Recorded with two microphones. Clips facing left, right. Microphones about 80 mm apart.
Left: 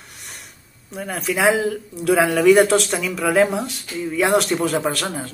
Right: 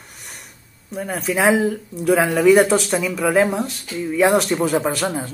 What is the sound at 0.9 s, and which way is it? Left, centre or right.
Speech, centre.